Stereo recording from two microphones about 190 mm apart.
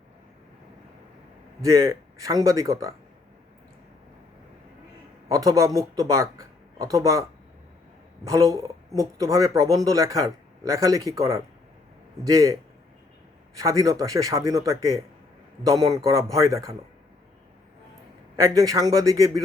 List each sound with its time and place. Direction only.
1.6 s speech: 15° right (ahead or behind)
5.3 s speech: 20° right (ahead or behind)
13.6 s speech: 15° right (ahead or behind)
18.3 s speech: 15° right (ahead or behind)